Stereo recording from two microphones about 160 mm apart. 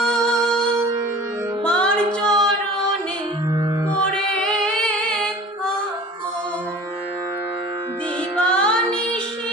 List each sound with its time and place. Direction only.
0.0 s music: 5° left (ahead or behind)
1.6 s music: 5° left (ahead or behind)
2.2 s singing: 5° left (ahead or behind)
4.4 s female singing: 5° left (ahead or behind)
8.4 s music: 5° left (ahead or behind)